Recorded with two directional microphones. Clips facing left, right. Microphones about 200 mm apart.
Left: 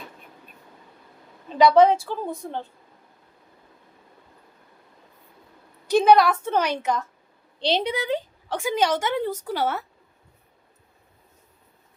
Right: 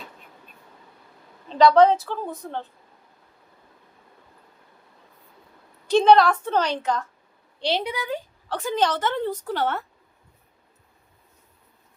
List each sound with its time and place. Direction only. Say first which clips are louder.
1.5 s a woman's voice: even; 10° left (ahead or behind)
6.0 s a woman's voice: right 1 dB; 10° left (ahead or behind)
7.7 s speech: left 3 dB; 25° left (ahead or behind)
8.5 s a woman's voice: left 1 dB; 10° left (ahead or behind)